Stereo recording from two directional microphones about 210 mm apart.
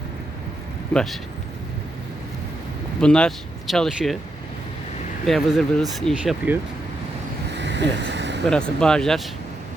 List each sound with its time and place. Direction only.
0.9 s speech: centre (ahead or behind)
3.0 s speech: 5° left (ahead or behind)
5.2 s speech: centre (ahead or behind)
7.5 s vehicle: 55° right (ahead or behind)
8.4 s speech: 5° left (ahead or behind)